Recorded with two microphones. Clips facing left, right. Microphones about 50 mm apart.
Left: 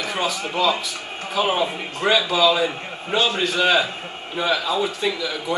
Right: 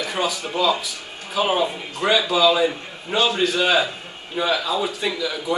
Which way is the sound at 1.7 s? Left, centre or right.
Left.